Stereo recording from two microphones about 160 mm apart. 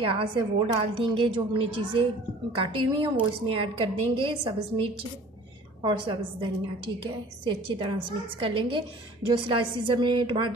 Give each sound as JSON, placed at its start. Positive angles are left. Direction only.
{"t": 0.1, "sound": "a woman's voice", "side_deg": -35}